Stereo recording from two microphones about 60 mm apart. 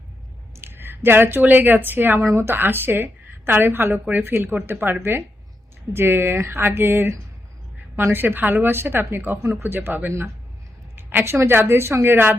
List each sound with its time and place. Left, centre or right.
0.5 s a woman's voice: right
2.2 s speech: right
2.5 s a woman's voice: right